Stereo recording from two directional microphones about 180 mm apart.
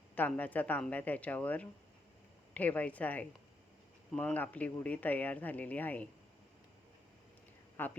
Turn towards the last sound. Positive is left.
turn(degrees=10)  # may be behind; listen again after turning